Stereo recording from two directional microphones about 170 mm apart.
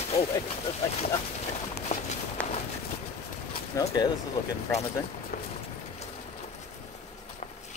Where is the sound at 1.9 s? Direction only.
40° left (ahead or behind).